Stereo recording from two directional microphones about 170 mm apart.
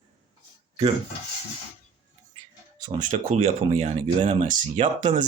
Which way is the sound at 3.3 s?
40° right (ahead or behind).